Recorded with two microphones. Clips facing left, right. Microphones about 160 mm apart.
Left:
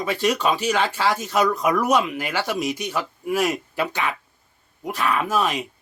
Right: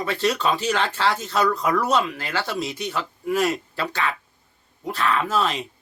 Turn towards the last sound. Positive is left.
turn(degrees=10)  # may be behind; listen again after turning